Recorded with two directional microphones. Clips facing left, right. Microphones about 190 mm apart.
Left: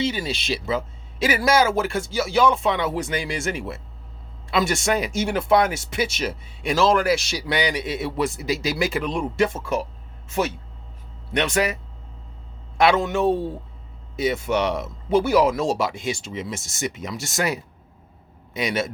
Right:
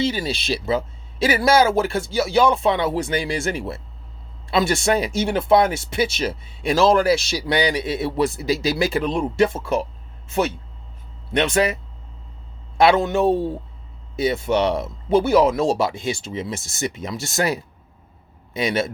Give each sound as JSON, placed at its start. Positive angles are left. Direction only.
{"t": 0.0, "sound": "speech", "side_deg": -35}
{"t": 11.3, "sound": "speech", "side_deg": -30}